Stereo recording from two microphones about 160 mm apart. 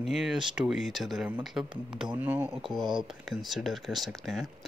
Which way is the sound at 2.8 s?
30° right (ahead or behind).